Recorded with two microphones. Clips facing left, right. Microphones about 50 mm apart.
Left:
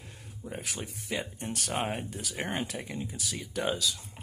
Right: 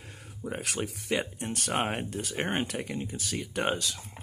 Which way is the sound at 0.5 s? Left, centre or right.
Right.